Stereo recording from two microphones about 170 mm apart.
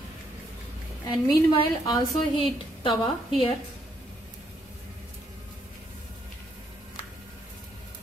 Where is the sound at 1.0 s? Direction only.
25° left (ahead or behind).